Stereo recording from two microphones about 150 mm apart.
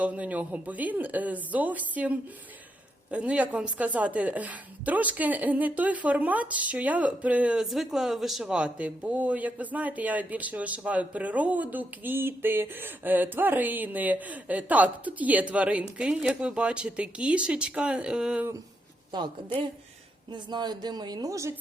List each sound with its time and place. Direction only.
0.0 s a woman's voice: 10° right (ahead or behind)
19.1 s speech: 30° right (ahead or behind)